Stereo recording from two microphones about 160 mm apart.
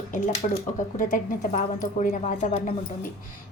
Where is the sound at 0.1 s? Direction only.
55° left (ahead or behind).